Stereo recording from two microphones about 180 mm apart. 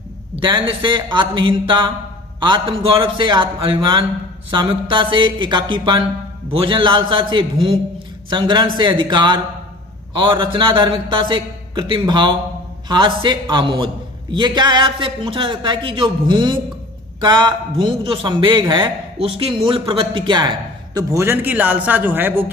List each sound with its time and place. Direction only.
0.4 s a man's voice: 25° right (ahead or behind); by 22.5 s 10° right (ahead or behind)